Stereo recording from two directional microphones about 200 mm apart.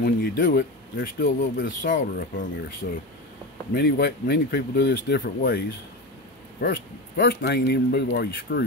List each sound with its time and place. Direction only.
0.0 s speech: 50° left (ahead or behind)
1.8 s speech: 40° left (ahead or behind)
2.8 s speech: 55° left (ahead or behind)
6.6 s speech: 50° left (ahead or behind)